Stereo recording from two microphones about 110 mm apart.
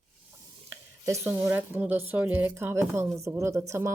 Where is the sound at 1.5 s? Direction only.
15° right (ahead or behind).